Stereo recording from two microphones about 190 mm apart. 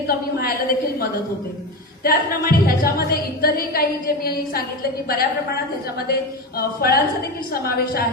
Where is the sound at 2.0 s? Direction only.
50° left (ahead or behind).